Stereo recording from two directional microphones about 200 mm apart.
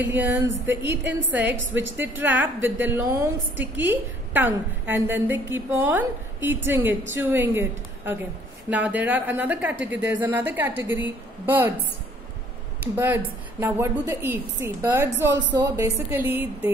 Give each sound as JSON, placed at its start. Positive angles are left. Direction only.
{"t": 0.0, "sound": "a woman's voice", "side_deg": -10}
{"t": 0.8, "sound": "a woman's voice", "side_deg": -60}
{"t": 2.0, "sound": "a woman's voice", "side_deg": -10}
{"t": 12.8, "sound": "a woman's voice", "side_deg": -10}